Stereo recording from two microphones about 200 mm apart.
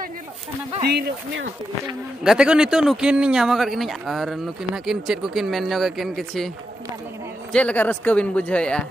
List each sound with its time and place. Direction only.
0.8 s speech: 60° right (ahead or behind)
2.2 s speech: 5° right (ahead or behind)
7.5 s speech: 5° left (ahead or behind)